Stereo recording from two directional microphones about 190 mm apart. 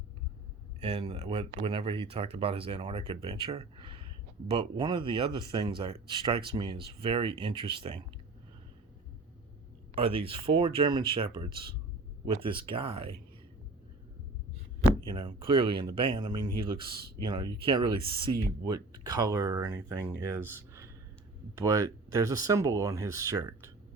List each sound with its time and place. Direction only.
0.8 s speech: 30° right (ahead or behind)
9.9 s speech: 30° right (ahead or behind)
15.0 s speech: 25° right (ahead or behind)